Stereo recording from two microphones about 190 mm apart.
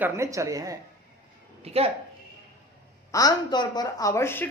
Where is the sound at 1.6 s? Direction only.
30° right (ahead or behind).